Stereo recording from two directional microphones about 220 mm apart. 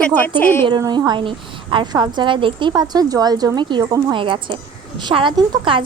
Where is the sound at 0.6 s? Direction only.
20° right (ahead or behind).